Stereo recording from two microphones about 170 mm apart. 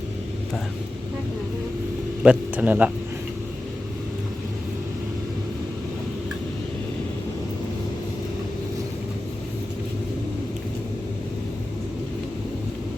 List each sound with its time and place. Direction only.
2.2 s speech: 10° right (ahead or behind)